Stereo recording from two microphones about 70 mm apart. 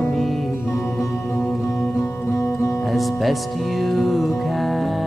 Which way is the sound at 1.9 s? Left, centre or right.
Left.